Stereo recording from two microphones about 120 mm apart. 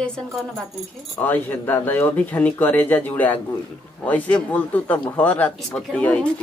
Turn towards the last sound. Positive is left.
turn(degrees=10)  # may be behind; listen again after turning